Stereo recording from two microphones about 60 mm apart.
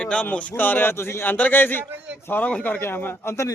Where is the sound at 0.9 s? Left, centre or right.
Left.